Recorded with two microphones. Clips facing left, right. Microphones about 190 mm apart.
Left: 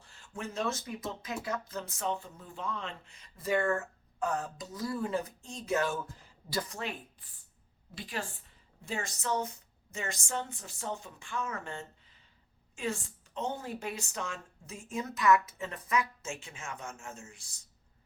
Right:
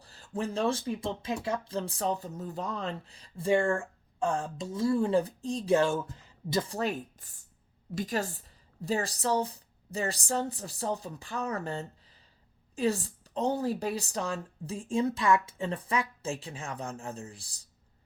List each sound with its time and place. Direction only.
0.0 s a woman's voice: 35° right (ahead or behind)
6.7 s a woman's voice: 40° right (ahead or behind)